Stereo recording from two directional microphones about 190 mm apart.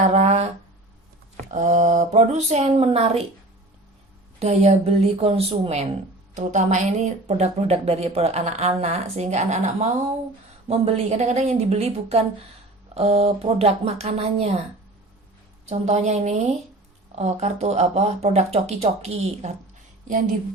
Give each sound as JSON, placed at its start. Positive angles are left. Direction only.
{"t": 0.0, "sound": "a sound", "side_deg": -35}
{"t": 1.5, "sound": "speech", "side_deg": -40}
{"t": 4.4, "sound": "speech", "side_deg": -35}
{"t": 15.7, "sound": "speech", "side_deg": -35}